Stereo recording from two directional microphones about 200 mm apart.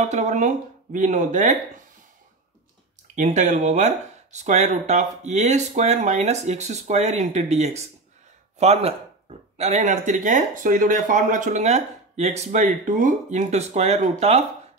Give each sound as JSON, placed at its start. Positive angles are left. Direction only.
{"t": 0.0, "sound": "speech", "side_deg": -35}
{"t": 3.2, "sound": "speech", "side_deg": -35}